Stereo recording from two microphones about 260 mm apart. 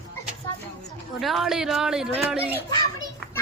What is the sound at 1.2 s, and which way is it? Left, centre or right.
A woman's voice, centre.